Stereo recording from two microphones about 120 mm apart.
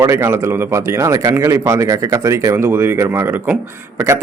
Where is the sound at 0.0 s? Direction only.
20° right (ahead or behind).